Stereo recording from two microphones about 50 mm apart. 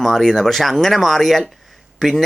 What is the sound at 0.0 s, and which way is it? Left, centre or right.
Speech, centre.